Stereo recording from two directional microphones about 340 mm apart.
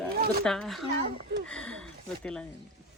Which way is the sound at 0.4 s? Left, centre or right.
Centre.